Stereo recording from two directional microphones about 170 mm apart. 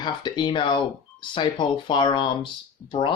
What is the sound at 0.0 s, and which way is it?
Speech, 25° left (ahead or behind).